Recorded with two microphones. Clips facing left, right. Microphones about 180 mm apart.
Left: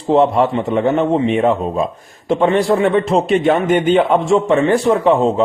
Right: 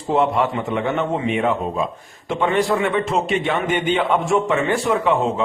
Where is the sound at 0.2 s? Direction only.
35° left (ahead or behind).